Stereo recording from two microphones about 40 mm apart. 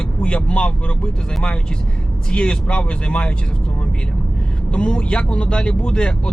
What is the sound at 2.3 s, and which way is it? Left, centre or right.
Speech, left.